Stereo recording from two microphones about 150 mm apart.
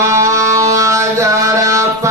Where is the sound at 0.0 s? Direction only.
20° right (ahead or behind).